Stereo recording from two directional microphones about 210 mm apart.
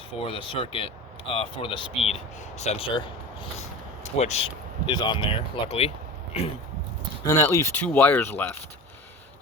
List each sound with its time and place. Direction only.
0.2 s speech: 25° left (ahead or behind)
4.0 s speech: 30° left (ahead or behind)
7.3 s speech: 15° left (ahead or behind)